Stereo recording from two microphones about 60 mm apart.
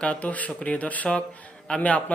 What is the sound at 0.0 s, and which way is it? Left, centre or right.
A man's voice, left.